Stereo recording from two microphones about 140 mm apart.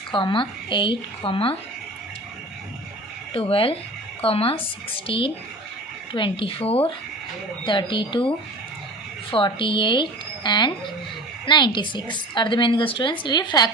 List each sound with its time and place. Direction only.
0.1 s a woman's voice: 35° left (ahead or behind)
3.3 s a woman's voice: 40° left (ahead or behind)
9.3 s a woman's voice: 35° left (ahead or behind)